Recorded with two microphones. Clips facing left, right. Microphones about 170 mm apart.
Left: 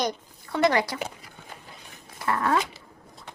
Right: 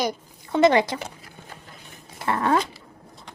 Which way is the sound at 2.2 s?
25° right (ahead or behind).